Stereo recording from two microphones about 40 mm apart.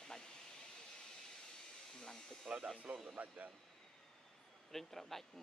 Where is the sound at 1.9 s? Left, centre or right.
Centre.